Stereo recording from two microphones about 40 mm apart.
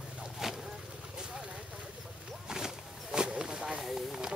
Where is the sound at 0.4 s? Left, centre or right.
Centre.